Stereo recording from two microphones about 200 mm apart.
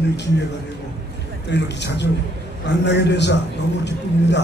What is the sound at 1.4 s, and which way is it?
Speech, 60° left (ahead or behind).